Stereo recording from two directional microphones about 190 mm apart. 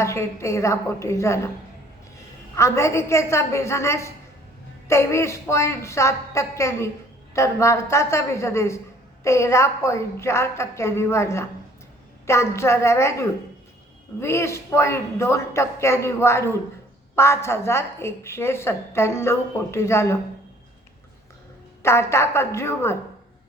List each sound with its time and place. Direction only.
0.0 s a woman's voice: 15° left (ahead or behind)
2.6 s a woman's voice: 15° left (ahead or behind)
21.8 s a woman's voice: 15° left (ahead or behind)